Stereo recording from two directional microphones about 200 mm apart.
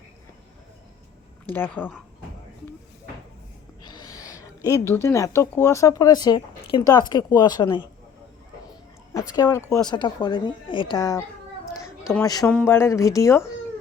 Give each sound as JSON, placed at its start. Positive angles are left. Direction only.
{"t": 1.5, "sound": "speech", "side_deg": 10}
{"t": 3.8, "sound": "a sound", "side_deg": 20}
{"t": 5.0, "sound": "a woman's voice", "side_deg": 15}
{"t": 9.3, "sound": "a woman's voice", "side_deg": 15}
{"t": 11.7, "sound": "a sound", "side_deg": 15}
{"t": 12.5, "sound": "speech", "side_deg": 10}